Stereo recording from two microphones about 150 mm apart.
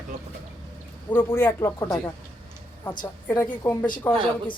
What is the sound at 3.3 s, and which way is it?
Speech, 15° left (ahead or behind).